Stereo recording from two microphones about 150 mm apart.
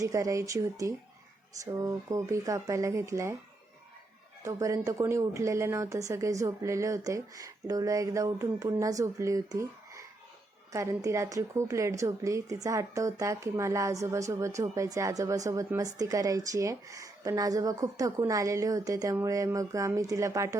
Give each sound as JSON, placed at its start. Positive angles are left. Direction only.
{"t": 0.0, "sound": "a woman's voice", "side_deg": -20}
{"t": 4.4, "sound": "a woman's voice", "side_deg": -20}